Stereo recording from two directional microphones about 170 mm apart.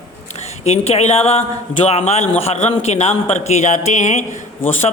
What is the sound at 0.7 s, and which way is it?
A man's voice, 40° left (ahead or behind).